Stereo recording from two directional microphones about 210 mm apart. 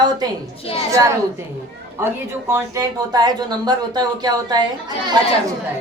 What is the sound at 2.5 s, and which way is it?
Speech, 15° right (ahead or behind).